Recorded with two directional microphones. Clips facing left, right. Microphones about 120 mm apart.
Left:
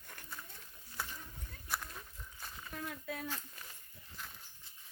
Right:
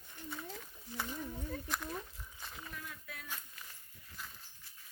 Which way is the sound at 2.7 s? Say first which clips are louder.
Left 9 dB; 55° left (ahead or behind).